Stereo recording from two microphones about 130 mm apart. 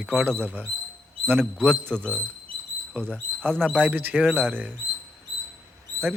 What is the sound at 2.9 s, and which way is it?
Speech, 15° right (ahead or behind).